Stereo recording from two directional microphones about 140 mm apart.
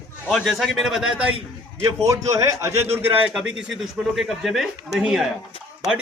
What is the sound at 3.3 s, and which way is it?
A man's voice, 5° right (ahead or behind).